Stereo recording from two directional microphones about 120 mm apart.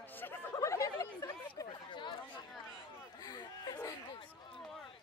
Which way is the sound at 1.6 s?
40° left (ahead or behind).